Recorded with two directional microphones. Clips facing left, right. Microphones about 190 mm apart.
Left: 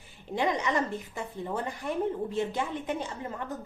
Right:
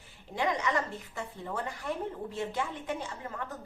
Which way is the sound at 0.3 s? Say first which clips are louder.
Left 2 dB; 20° left (ahead or behind).